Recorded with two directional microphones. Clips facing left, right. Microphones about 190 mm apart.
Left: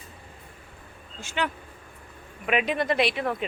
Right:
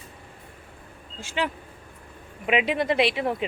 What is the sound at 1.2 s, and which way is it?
Speech, 30° right (ahead or behind).